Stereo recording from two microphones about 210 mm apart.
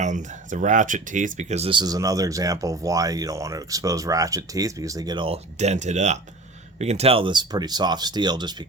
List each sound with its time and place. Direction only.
0.0 s speech: 35° right (ahead or behind); by 8.6 s 20° right (ahead or behind)